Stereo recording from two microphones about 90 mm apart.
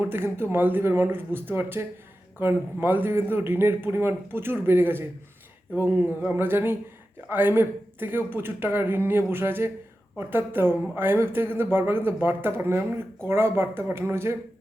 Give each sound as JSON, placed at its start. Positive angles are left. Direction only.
{"t": 0.0, "sound": "speech", "side_deg": -25}